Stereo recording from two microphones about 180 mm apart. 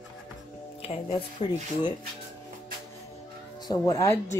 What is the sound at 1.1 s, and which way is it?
Speech, 25° left (ahead or behind).